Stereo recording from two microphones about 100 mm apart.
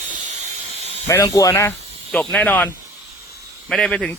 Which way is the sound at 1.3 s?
30° left (ahead or behind).